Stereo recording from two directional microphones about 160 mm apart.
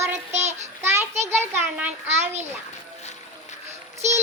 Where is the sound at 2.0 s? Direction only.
45° right (ahead or behind).